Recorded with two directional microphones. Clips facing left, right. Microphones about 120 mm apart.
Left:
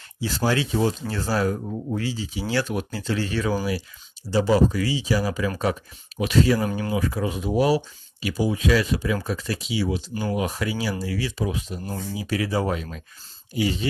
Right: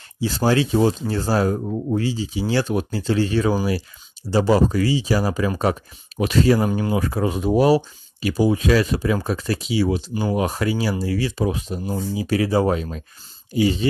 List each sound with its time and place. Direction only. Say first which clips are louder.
0.2 s speech: right 5 dB; 30° right (ahead or behind)
4.3 s speech: right 2 dB; 40° right (ahead or behind)